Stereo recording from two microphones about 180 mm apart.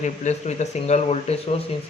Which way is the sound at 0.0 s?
40° left (ahead or behind).